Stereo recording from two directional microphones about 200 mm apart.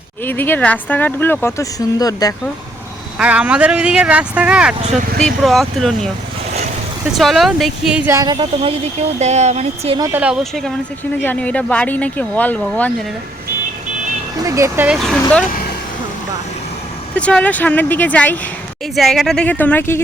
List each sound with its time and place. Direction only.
0.3 s speech: 10° left (ahead or behind)
3.2 s speech: 5° right (ahead or behind)
4.8 s speech: 35° right (ahead or behind)
5.2 s speech: centre (ahead or behind); by 10.0 s 30° right (ahead or behind)
10.0 s speech: 10° right (ahead or behind)
11.2 s speech: 10° left (ahead or behind)
14.4 s speech: 15° right (ahead or behind)
17.2 s speech: 5° left (ahead or behind)